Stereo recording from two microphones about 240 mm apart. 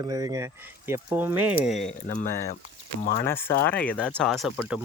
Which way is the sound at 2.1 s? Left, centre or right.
Left.